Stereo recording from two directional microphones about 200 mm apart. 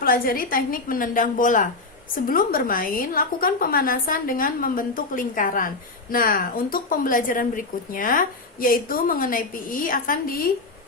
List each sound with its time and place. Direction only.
0.0 s a woman's voice: 45° left (ahead or behind)